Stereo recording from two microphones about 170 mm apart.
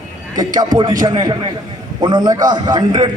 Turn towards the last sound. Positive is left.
turn(degrees=-25)  # may be behind; listen again after turning